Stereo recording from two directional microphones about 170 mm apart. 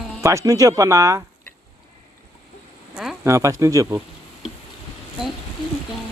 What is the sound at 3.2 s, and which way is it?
Speech, 15° right (ahead or behind).